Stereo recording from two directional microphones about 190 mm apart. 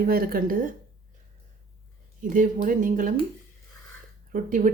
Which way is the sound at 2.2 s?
45° right (ahead or behind).